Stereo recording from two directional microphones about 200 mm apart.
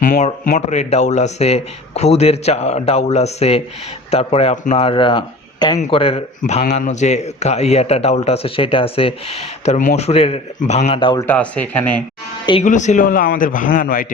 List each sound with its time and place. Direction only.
0.0 s a sound: 40° left (ahead or behind)
0.4 s a man's voice: 35° left (ahead or behind)
11.3 s speech: 5° left (ahead or behind)
12.6 s a man's voice: 35° left (ahead or behind)